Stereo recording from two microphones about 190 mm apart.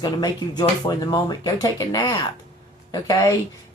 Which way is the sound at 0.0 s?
20° left (ahead or behind).